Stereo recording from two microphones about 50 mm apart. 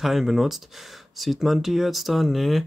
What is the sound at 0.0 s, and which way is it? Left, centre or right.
Speech, centre.